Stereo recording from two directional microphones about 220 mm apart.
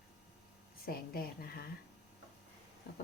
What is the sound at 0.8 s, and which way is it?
Speech, 40° left (ahead or behind).